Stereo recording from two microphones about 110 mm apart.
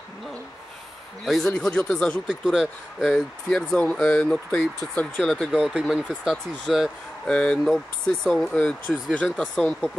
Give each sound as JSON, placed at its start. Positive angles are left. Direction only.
{"t": 1.2, "sound": "speech", "side_deg": 0}
{"t": 2.2, "sound": "speech", "side_deg": -5}
{"t": 8.5, "sound": "speech", "side_deg": 15}